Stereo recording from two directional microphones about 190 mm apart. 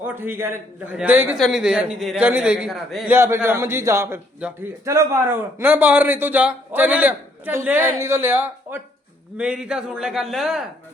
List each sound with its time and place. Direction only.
0.0 s a man's voice: 10° right (ahead or behind)